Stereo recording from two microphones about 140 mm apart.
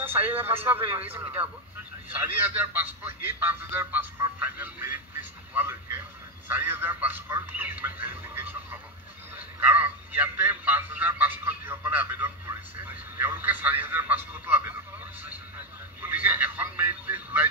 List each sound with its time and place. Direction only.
0.0 s a man's voice: 15° right (ahead or behind)
2.7 s a man's voice: 15° right (ahead or behind)
9.6 s a man's voice: 10° right (ahead or behind)
16.0 s a man's voice: 15° right (ahead or behind)